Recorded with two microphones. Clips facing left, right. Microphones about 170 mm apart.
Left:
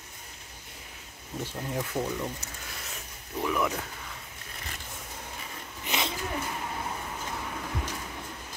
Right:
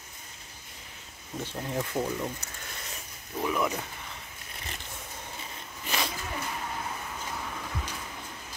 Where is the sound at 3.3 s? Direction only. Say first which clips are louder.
Even; 10° right (ahead or behind).